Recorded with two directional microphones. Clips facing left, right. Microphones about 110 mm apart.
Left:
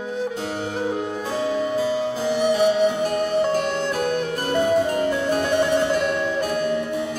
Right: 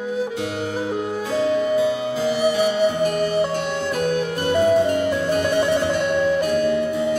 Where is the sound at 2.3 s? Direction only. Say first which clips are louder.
Left 2 dB; 5° right (ahead or behind).